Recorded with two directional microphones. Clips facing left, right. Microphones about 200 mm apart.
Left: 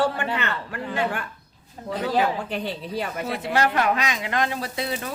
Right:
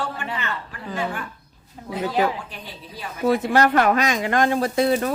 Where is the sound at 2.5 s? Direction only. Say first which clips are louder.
Left 10 dB; 65° left (ahead or behind).